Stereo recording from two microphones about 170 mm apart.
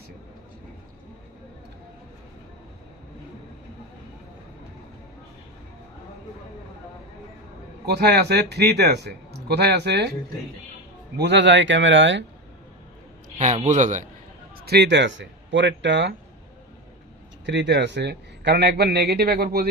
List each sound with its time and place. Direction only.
7.9 s a man's voice: 75° right (ahead or behind)
11.2 s speech: 90° right
13.7 s a man's voice: 45° right (ahead or behind)
14.5 s speech: 65° right (ahead or behind); by 16.1 s 90° right
17.4 s a man's voice: 90° right; by 19.6 s 60° right (ahead or behind)